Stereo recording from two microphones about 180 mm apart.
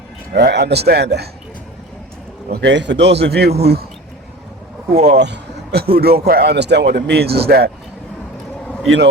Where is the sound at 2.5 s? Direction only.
75° right (ahead or behind).